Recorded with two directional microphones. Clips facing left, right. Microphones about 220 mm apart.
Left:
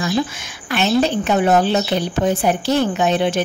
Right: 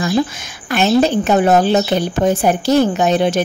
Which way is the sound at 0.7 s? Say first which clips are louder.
Right 3 dB; 45° right (ahead or behind).